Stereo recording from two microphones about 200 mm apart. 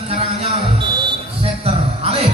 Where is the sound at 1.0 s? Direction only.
30° right (ahead or behind).